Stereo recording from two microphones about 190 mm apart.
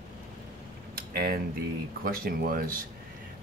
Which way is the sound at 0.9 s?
55° right (ahead or behind).